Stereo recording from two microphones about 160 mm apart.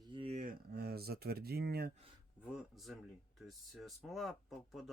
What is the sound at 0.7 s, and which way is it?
Speech, 85° right.